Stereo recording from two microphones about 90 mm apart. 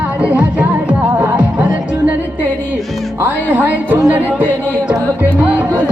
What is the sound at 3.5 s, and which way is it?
Music, 20° right (ahead or behind).